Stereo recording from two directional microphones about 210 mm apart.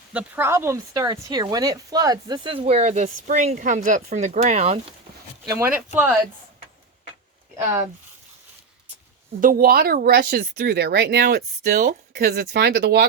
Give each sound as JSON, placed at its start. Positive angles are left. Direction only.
{"t": 0.1, "sound": "speech", "side_deg": -10}
{"t": 5.5, "sound": "speech", "side_deg": -10}
{"t": 9.4, "sound": "speech", "side_deg": -45}